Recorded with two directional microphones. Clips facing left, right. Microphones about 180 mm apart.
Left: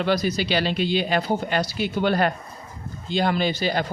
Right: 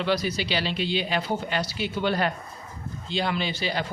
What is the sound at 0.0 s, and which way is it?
Speech, 45° left (ahead or behind).